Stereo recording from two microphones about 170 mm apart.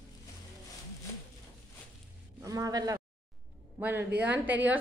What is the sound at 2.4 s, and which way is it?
A woman's voice, 20° right (ahead or behind).